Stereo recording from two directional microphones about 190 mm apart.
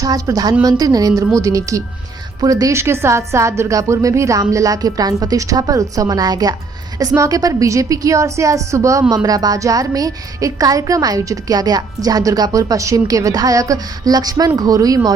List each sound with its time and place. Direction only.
0.0 s a woman's voice: 20° right (ahead or behind)